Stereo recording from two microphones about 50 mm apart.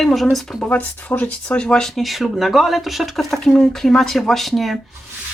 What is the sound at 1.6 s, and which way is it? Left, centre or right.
Speech, centre.